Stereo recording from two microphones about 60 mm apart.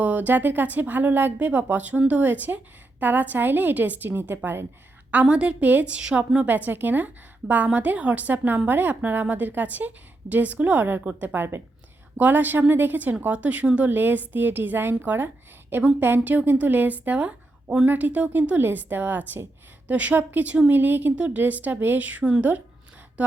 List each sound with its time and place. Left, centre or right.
0.0 s a woman's voice: right
5.1 s a woman's voice: right
16.0 s a woman's voice: right; by 17.8 s centre
17.8 s a woman's voice: right